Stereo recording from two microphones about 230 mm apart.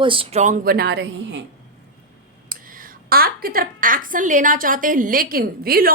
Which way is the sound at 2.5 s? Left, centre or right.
Right.